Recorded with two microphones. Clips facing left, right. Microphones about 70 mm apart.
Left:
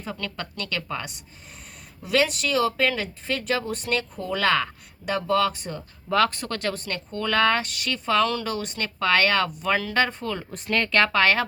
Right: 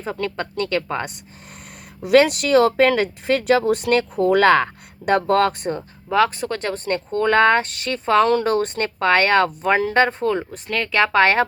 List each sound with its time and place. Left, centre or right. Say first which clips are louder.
0.0 s speech: right 7 dB; right
2.0 s speech: right 8 dB; right
6.1 s speech: right 4 dB; centre
10.5 s speech: right 1 dB; centre
11.1 s speech: right 5 dB; right